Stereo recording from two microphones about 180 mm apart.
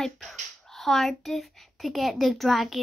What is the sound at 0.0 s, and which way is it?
A child's voice, centre (ahead or behind).